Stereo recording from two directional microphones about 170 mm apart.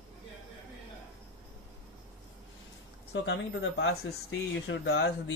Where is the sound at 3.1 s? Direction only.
90° left.